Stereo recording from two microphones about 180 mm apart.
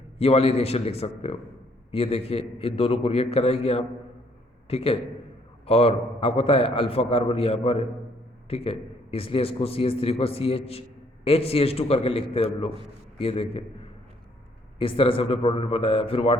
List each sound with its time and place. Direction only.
0.2 s a man's voice: 35° left (ahead or behind)